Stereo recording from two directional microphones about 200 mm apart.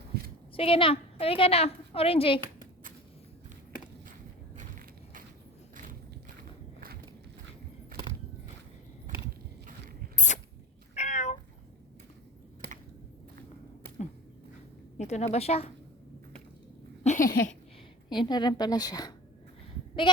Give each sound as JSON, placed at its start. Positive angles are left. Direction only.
{"t": 0.5, "sound": "a woman's voice", "side_deg": 30}
{"t": 4.5, "sound": "crushing", "side_deg": -40}
{"t": 6.7, "sound": "a sound", "side_deg": -50}
{"t": 10.2, "sound": "rodents", "side_deg": 35}
{"t": 10.9, "sound": "cat", "side_deg": 35}
{"t": 14.9, "sound": "a woman's voice", "side_deg": 35}
{"t": 17.0, "sound": "a sound", "side_deg": 40}
{"t": 18.1, "sound": "a woman's voice", "side_deg": 20}